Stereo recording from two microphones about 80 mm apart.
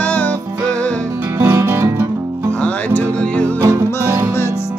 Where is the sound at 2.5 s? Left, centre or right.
Centre.